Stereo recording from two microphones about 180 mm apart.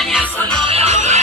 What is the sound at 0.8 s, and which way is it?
Music, 35° right (ahead or behind).